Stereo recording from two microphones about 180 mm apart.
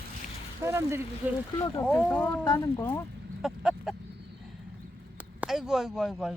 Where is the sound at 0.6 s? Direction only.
15° right (ahead or behind).